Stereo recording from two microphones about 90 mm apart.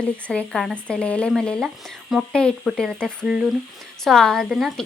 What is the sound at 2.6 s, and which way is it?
Speech, centre (ahead or behind).